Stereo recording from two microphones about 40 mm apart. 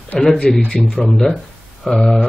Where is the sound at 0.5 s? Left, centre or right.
Centre.